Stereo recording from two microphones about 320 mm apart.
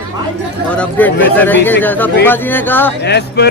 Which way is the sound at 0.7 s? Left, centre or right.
Centre.